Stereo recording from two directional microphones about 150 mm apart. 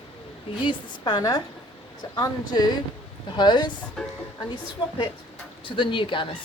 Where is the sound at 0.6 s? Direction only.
30° left (ahead or behind).